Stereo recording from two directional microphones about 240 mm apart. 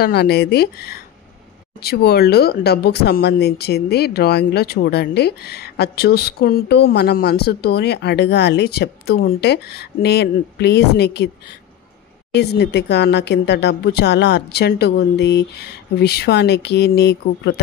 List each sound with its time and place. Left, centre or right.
0.0 s speech: left
12.4 s a woman's voice: left